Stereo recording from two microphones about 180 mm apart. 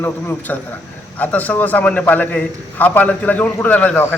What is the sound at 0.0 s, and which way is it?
A man's voice, 10° left (ahead or behind).